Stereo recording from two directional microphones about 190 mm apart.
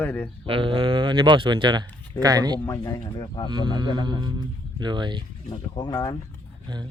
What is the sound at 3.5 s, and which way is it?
Speech, 25° right (ahead or behind).